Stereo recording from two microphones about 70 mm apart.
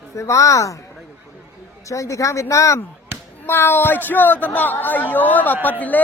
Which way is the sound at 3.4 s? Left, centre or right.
Left.